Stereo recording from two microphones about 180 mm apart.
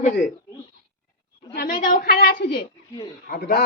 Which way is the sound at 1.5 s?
50° left (ahead or behind).